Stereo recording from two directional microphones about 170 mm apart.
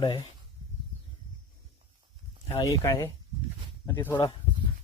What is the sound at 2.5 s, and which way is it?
Speech, 20° left (ahead or behind).